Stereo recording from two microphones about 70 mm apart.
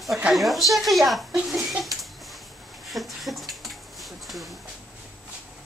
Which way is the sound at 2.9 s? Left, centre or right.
Centre.